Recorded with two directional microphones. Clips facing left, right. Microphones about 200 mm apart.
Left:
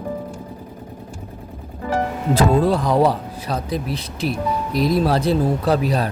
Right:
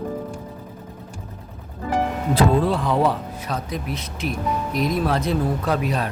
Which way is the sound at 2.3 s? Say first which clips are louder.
Left 3 dB; 40° left (ahead or behind).